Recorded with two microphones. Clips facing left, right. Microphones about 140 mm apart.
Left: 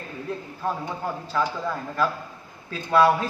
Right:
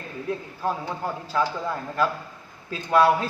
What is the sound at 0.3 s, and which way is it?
A man's voice, 5° right (ahead or behind).